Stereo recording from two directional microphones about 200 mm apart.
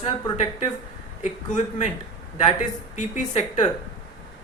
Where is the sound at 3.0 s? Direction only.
35° left (ahead or behind).